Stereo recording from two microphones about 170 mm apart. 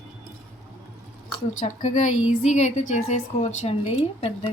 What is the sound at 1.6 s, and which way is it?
A woman's voice, 45° left (ahead or behind).